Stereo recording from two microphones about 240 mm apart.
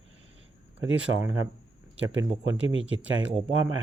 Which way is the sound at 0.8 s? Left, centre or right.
Right.